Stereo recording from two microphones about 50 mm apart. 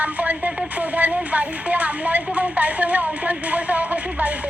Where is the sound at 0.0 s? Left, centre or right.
Right.